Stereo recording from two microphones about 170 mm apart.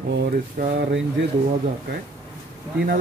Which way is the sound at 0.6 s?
65° right (ahead or behind).